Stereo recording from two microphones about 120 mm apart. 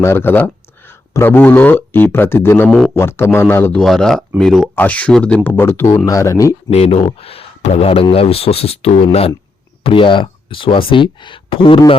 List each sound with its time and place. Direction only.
0.0 s speech: 20° left (ahead or behind)
2.6 s speech: 5° left (ahead or behind)
2.9 s speech: 20° left (ahead or behind)
3.8 s speech: 5° left (ahead or behind)
4.7 s speech: 15° left (ahead or behind)
6.7 s speech: 60° left (ahead or behind)